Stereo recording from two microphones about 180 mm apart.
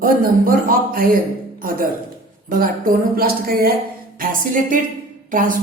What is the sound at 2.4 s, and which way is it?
A woman's voice, 50° right (ahead or behind).